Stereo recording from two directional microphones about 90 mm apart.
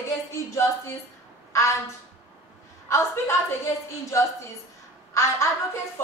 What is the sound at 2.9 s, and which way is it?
A woman's voice, 30° left (ahead or behind).